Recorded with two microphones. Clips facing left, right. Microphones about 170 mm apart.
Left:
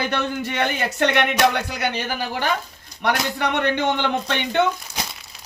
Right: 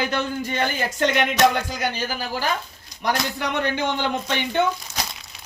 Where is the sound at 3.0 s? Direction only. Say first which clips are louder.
Left 2 dB; 65° left (ahead or behind).